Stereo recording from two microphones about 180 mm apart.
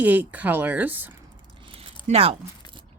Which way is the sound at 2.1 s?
35° right (ahead or behind).